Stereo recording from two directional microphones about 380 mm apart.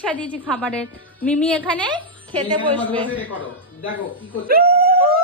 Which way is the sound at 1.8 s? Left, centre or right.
Centre.